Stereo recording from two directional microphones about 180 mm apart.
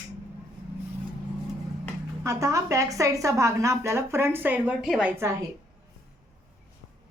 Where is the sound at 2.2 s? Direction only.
15° right (ahead or behind).